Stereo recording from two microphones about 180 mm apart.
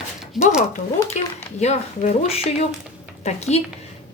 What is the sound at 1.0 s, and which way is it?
Speech, 20° left (ahead or behind).